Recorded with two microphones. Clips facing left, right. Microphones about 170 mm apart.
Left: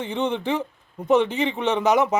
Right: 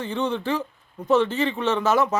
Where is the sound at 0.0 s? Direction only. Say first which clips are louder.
Left 1 dB; 20° left (ahead or behind).